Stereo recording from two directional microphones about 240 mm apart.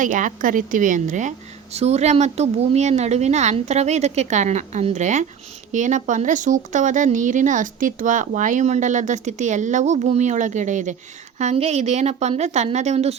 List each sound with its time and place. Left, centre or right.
0.0 s a woman's voice: right